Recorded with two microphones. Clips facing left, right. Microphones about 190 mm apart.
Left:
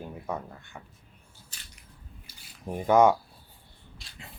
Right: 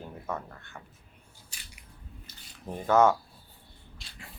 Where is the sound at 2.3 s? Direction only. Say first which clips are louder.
Left 3 dB; 10° left (ahead or behind).